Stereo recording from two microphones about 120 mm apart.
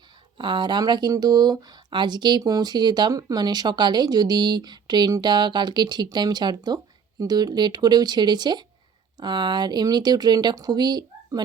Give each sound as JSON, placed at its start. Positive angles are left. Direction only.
{"t": 0.3, "sound": "speech", "side_deg": -40}